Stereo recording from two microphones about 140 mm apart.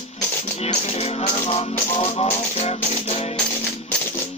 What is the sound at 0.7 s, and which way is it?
Music, 45° left (ahead or behind).